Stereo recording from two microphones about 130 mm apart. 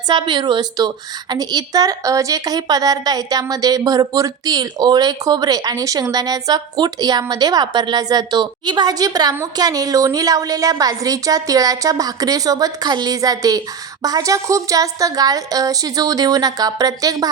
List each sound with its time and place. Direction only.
0.1 s a woman's voice: 35° right (ahead or behind)